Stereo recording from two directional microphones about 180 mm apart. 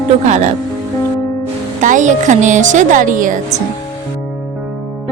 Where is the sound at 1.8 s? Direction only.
45° right (ahead or behind).